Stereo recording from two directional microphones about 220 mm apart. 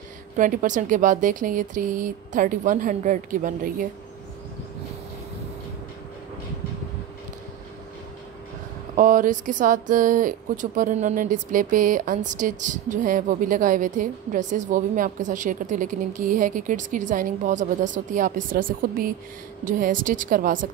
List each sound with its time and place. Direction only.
0.4 s speech: 35° right (ahead or behind)
8.9 s speech: 35° right (ahead or behind)